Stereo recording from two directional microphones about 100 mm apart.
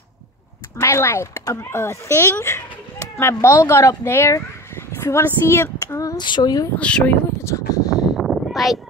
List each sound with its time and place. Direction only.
0.7 s speech: 25° left (ahead or behind)
6.1 s speech: 50° left (ahead or behind)
6.8 s speech: 10° left (ahead or behind)
7.3 s speech: 30° left (ahead or behind)
8.2 s a sound: centre (ahead or behind)